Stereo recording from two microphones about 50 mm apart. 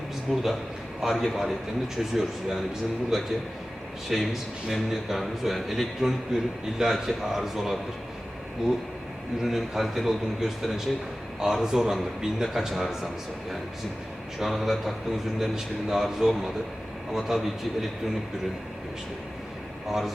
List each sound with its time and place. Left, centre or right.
0.3 s a man's voice: centre
9.4 s a man's voice: centre
14.3 s a man's voice: centre